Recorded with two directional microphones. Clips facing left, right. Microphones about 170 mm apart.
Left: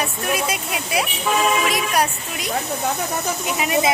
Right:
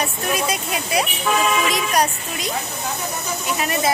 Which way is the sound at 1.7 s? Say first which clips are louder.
Right 1 dB; 5° left (ahead or behind).